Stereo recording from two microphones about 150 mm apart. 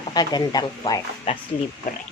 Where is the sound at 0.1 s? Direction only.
30° left (ahead or behind).